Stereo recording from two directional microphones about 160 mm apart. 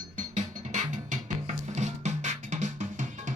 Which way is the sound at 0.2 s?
45° right (ahead or behind).